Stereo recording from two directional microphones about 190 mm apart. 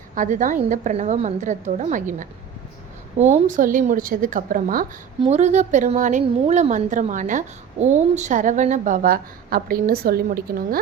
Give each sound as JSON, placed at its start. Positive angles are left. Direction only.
{"t": 0.1, "sound": "a woman's voice", "side_deg": -40}
{"t": 5.2, "sound": "a woman's voice", "side_deg": -35}